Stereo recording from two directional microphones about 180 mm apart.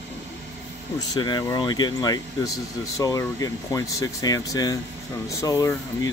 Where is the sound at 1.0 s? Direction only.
25° left (ahead or behind).